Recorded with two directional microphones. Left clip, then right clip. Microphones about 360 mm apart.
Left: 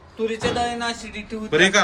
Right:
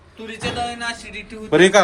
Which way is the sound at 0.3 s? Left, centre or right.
Left.